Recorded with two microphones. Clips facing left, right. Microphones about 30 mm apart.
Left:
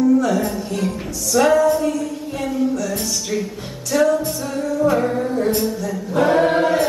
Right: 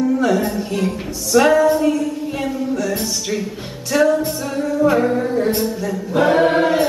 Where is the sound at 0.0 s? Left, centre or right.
Right.